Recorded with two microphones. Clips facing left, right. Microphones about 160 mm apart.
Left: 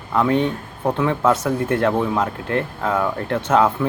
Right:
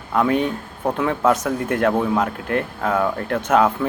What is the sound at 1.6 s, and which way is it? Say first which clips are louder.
Speech: even; 25° left (ahead or behind).